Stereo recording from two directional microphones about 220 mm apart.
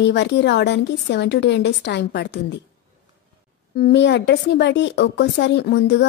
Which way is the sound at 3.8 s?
50° left (ahead or behind).